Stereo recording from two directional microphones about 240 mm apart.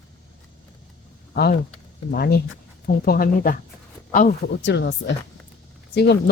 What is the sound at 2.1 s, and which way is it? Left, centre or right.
Speech, left.